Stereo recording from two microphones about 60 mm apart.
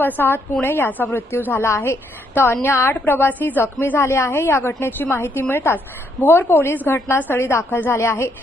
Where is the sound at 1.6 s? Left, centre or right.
Left.